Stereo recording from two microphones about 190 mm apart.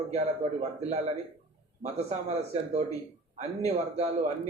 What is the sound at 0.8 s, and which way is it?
A man's voice, 35° right (ahead or behind).